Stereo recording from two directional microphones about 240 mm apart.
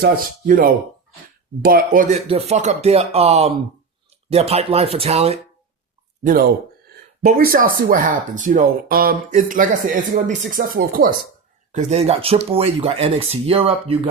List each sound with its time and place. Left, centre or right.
0.0 s speech: right
2.2 s speech: right
7.2 s speech: right